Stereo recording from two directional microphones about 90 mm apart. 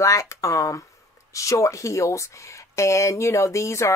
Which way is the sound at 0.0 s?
35° left (ahead or behind).